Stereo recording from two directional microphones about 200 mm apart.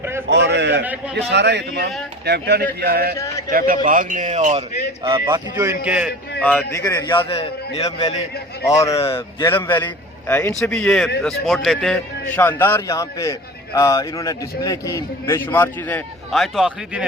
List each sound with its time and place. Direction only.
0.3 s a sound: 60° right (ahead or behind)
1.1 s a man's voice: 60° right (ahead or behind); by 4.6 s 35° right (ahead or behind)
5.0 s speech: 20° right (ahead or behind)
5.8 s speech: 5° right (ahead or behind)
6.4 s a man's voice: 10° left (ahead or behind); by 7.9 s 30° left (ahead or behind)
8.6 s a man's voice: 15° left (ahead or behind); by 17.1 s 5° right (ahead or behind)